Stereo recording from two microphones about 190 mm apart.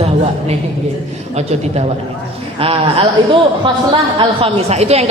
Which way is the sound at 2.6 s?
30° right (ahead or behind).